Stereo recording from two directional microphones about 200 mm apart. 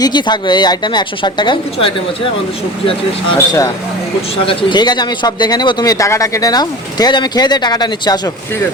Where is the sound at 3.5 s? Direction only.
15° left (ahead or behind).